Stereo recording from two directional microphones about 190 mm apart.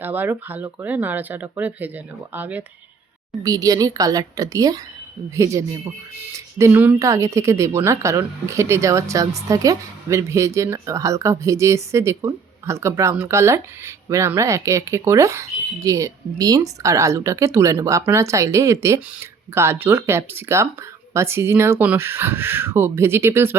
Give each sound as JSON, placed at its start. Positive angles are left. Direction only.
{"t": 0.0, "sound": "a woman's voice", "side_deg": -10}